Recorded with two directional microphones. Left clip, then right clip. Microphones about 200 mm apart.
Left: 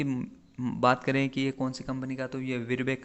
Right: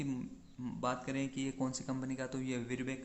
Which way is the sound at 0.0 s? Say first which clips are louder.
Left 9 dB; 30° left (ahead or behind).